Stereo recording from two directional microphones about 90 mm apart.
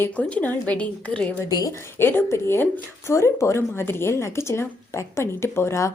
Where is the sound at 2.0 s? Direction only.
25° left (ahead or behind).